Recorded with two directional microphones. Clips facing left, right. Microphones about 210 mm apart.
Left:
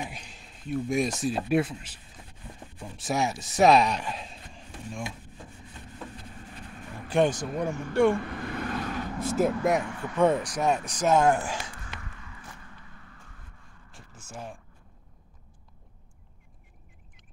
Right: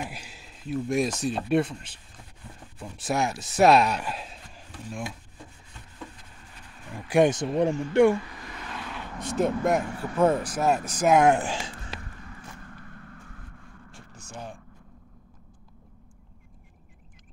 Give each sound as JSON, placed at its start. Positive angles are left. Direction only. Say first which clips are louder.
{"t": 0.0, "sound": "speech", "louder": "right 1 dB", "side_deg": -5}
{"t": 7.1, "sound": "speech", "louder": "right 3 dB", "side_deg": -10}
{"t": 7.3, "sound": "speech", "louder": "right 6 dB", "side_deg": -25}
{"t": 8.2, "sound": "vehicle", "louder": "left 8 dB", "side_deg": 60}
{"t": 9.2, "sound": "speech", "louder": "even", "side_deg": 5}
{"t": 9.8, "sound": "speech", "louder": "right 2 dB", "side_deg": -35}
{"t": 10.1, "sound": "speech", "louder": "right 1 dB", "side_deg": -5}
{"t": 11.8, "sound": "a sound", "louder": "right 3 dB", "side_deg": -30}
{"t": 13.9, "sound": "a sound", "louder": "even", "side_deg": 0}